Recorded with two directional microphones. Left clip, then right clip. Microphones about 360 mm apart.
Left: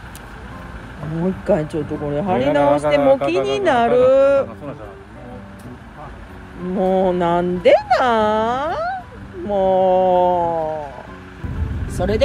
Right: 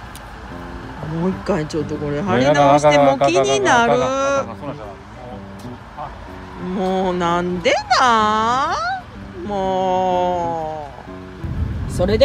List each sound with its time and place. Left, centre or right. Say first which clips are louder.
1.5 s speech: left 4 dB; centre
2.5 s speech: right 4 dB; right
3.4 s speech: right 2 dB; centre
6.8 s speech: left 3 dB; centre